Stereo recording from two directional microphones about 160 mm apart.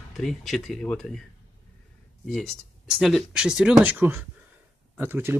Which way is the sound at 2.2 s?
Centre (ahead or behind).